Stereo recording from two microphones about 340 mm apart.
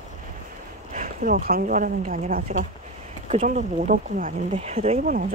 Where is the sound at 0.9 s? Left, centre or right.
Right.